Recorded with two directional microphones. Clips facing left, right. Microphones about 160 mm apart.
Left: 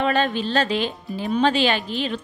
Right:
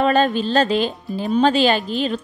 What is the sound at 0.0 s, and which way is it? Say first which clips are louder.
A woman's voice: right 4 dB; 40° right (ahead or behind).